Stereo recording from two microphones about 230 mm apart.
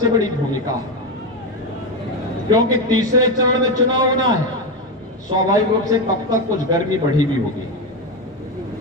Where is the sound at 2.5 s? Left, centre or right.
Centre.